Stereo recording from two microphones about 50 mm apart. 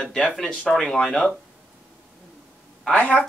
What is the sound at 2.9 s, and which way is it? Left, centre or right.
Speech, left.